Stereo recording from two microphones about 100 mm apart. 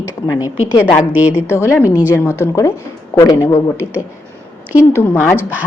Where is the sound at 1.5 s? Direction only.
25° left (ahead or behind).